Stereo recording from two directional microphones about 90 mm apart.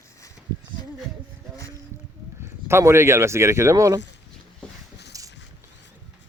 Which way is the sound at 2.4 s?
30° right (ahead or behind).